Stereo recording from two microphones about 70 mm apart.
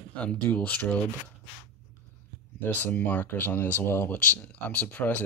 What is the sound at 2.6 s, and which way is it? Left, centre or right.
Speech, left.